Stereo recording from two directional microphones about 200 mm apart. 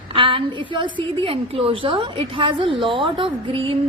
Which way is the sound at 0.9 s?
25° right (ahead or behind).